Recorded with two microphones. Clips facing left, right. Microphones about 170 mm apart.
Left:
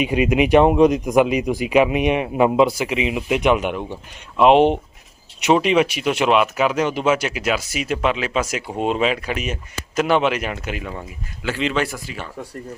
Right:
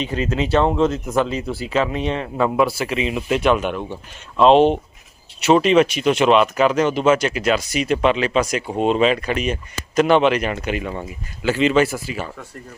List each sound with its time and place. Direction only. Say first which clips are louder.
0.0 s speech: left 5 dB; 15° left (ahead or behind); by 12.3 s 5° right (ahead or behind)